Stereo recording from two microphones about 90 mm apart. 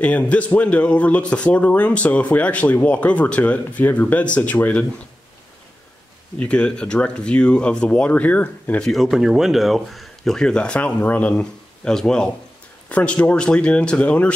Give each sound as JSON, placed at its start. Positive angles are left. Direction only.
{"t": 0.0, "sound": "a man's voice", "side_deg": 15}
{"t": 6.4, "sound": "a man's voice", "side_deg": 10}
{"t": 8.8, "sound": "a man's voice", "side_deg": 0}